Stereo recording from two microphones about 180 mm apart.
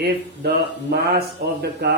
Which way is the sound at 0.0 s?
65° right (ahead or behind).